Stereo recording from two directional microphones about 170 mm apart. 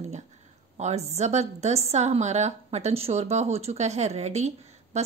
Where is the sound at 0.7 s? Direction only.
40° right (ahead or behind).